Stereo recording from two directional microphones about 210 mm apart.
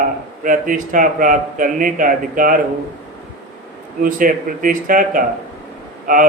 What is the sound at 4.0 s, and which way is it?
Speech, 40° right (ahead or behind).